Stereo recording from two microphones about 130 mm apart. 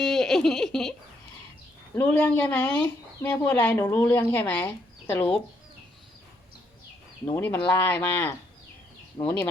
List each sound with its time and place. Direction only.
0.0 s a sound: centre (ahead or behind)
2.0 s speech: 10° left (ahead or behind)
3.2 s speech: 20° left (ahead or behind)
3.5 s speech: 10° left (ahead or behind)
7.3 s speech: 15° left (ahead or behind)
9.2 s speech: 40° left (ahead or behind)